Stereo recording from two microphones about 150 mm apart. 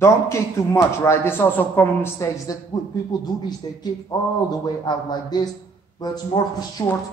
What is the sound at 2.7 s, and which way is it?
A man's voice, 30° left (ahead or behind).